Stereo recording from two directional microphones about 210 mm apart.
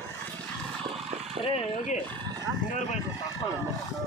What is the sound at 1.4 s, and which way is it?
Speech, 30° left (ahead or behind).